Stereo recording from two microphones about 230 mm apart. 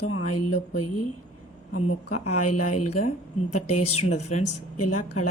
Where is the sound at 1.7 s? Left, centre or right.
Left.